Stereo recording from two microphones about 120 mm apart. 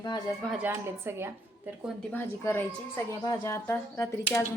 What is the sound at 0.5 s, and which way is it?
Speech, 15° right (ahead or behind).